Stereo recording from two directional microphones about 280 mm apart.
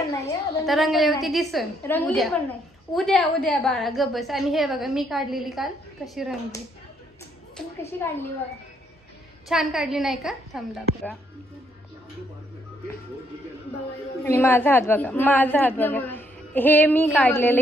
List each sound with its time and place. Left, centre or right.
0.1 s a sound: centre
0.7 s a woman's voice: centre
9.5 s a woman's voice: centre
14.2 s a woman's voice: centre